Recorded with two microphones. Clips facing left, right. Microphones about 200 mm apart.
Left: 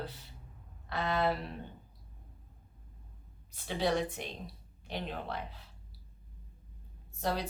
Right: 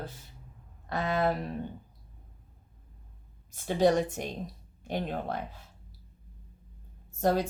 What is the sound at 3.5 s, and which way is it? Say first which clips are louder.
A woman's voice: right 7 dB; 45° right (ahead or behind).